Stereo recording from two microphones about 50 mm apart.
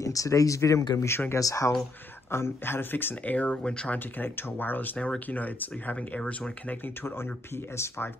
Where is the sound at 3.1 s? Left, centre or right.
Left.